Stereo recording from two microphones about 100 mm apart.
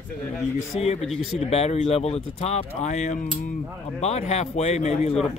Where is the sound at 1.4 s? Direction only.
90° left.